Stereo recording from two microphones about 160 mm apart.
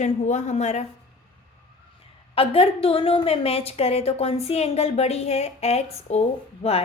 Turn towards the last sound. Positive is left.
turn(degrees=40)  # may be behind; listen again after turning